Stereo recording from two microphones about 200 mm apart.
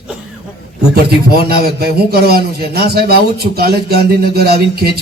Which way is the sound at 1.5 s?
50° right (ahead or behind).